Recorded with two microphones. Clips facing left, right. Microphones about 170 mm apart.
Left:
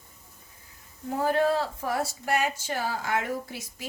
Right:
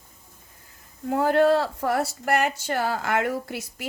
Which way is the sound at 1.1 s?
65° right (ahead or behind).